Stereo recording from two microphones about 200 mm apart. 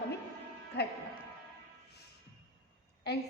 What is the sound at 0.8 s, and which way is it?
Music, 55° left (ahead or behind).